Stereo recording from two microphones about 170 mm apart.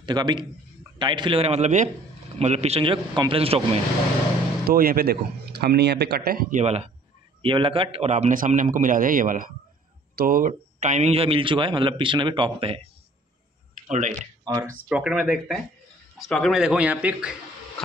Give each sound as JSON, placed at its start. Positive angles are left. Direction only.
{"t": 0.0, "sound": "a man's voice", "side_deg": -25}
{"t": 4.6, "sound": "speech", "side_deg": -60}
{"t": 6.5, "sound": "a man's voice", "side_deg": -40}
{"t": 13.7, "sound": "speech", "side_deg": -45}
{"t": 14.6, "sound": "speech", "side_deg": -5}